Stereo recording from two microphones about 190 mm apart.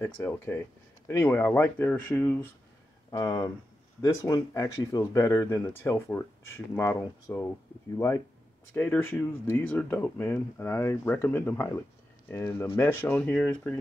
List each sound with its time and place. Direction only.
0.0 s speech: 10° left (ahead or behind)
3.1 s speech: 20° left (ahead or behind)
8.7 s speech: 10° left (ahead or behind)